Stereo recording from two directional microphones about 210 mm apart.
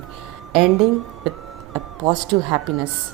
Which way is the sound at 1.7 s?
20° right (ahead or behind).